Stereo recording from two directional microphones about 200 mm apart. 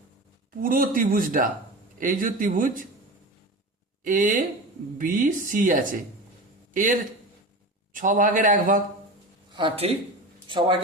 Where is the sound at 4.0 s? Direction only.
40° right (ahead or behind).